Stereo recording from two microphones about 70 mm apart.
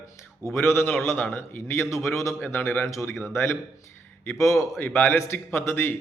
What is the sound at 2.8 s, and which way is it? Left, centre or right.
Speech, left.